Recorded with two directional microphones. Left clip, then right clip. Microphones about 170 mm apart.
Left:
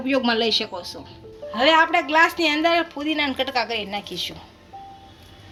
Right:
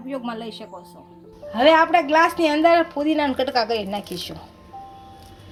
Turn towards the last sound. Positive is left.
turn(degrees=-35)  # may be behind; listen again after turning